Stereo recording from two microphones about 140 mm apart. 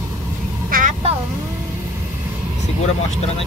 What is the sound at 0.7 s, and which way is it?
Vehicle, 70° right (ahead or behind).